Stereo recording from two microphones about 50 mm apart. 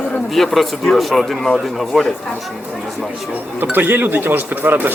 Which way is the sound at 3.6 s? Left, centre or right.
Right.